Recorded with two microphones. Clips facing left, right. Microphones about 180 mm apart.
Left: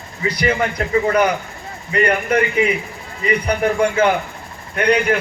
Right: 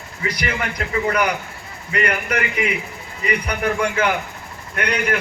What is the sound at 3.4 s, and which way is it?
Speech, 35° left (ahead or behind).